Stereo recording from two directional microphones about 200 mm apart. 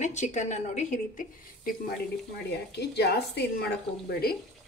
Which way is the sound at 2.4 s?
55° left (ahead or behind).